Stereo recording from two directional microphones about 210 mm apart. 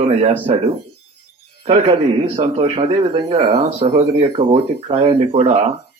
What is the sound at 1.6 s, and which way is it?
A man's voice, 30° right (ahead or behind).